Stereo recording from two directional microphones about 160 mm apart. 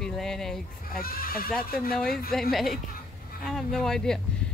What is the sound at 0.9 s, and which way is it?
Speech, 65° left (ahead or behind).